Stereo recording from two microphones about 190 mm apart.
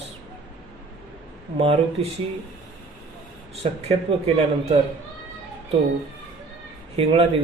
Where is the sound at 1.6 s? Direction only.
30° right (ahead or behind).